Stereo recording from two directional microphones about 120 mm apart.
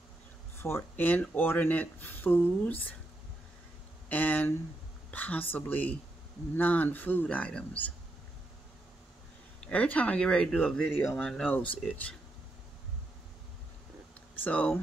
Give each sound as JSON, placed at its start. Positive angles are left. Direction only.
{"t": 0.6, "sound": "speech", "side_deg": 20}
{"t": 4.1, "sound": "speech", "side_deg": 15}
{"t": 9.7, "sound": "speech", "side_deg": 10}
{"t": 14.4, "sound": "speech", "side_deg": 10}